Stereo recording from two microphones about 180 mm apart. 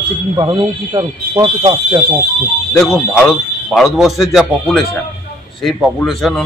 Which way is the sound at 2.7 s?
Centre (ahead or behind).